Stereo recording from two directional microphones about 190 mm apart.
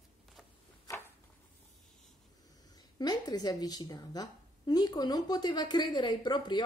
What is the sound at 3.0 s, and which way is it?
A woman's voice, 20° left (ahead or behind).